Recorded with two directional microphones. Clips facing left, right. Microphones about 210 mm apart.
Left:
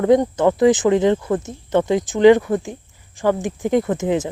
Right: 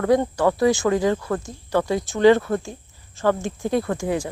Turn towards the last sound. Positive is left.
turn(degrees=20)  # may be behind; listen again after turning